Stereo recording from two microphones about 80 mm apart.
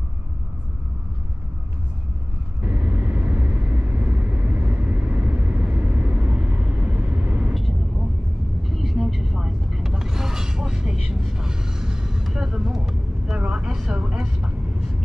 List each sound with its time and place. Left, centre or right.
2.6 s vehicle: centre
7.5 s vehicle: centre